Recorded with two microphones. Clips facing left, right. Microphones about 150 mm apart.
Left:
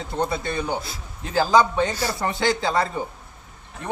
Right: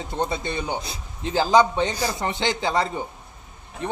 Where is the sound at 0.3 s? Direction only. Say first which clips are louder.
Left 1 dB; 20° right (ahead or behind).